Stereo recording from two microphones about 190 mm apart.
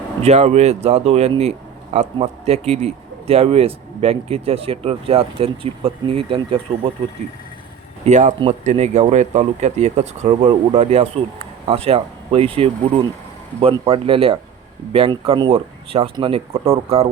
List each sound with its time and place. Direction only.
0.2 s speech: 35° right (ahead or behind)
8.0 s speech: 40° right (ahead or behind)